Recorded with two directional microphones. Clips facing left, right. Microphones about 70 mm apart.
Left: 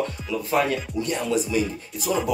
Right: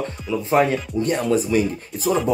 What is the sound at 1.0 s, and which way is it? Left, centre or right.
Speech, right.